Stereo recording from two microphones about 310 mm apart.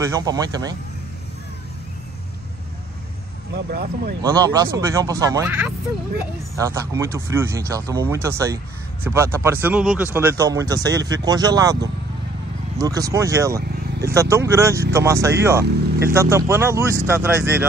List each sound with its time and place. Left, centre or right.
0.0 s speech: centre
3.5 s speech: right
4.2 s speech: centre
13.6 s vehicle: right
14.1 s speech: centre